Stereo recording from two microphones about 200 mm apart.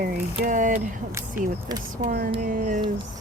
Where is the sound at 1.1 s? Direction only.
15° right (ahead or behind).